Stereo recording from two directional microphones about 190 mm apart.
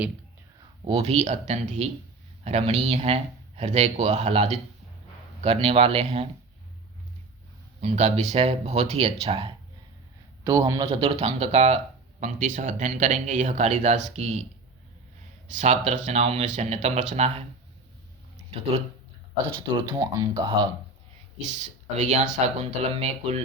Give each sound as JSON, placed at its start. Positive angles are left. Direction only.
{"t": 0.9, "sound": "speech", "side_deg": -30}
{"t": 7.8, "sound": "speech", "side_deg": -35}
{"t": 10.4, "sound": "speech", "side_deg": -20}
{"t": 10.8, "sound": "speech", "side_deg": -30}
{"t": 15.4, "sound": "speech", "side_deg": -40}
{"t": 19.5, "sound": "speech", "side_deg": -25}
{"t": 21.4, "sound": "speech", "side_deg": -40}